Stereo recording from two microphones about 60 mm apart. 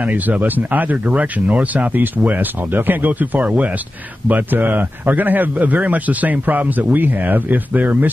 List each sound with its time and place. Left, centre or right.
0.0 s a man's voice: right